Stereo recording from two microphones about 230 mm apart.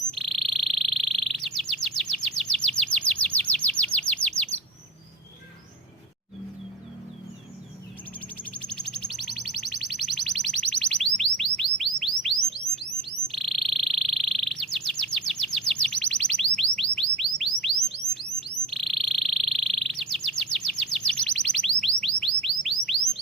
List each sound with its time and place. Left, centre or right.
0.1 s frog: centre
1.2 s chirp: centre
8.7 s a sound: centre
12.5 s music: right
13.2 s insect: centre
16.9 s bird: centre
18.6 s insect: centre
22.4 s bird: centre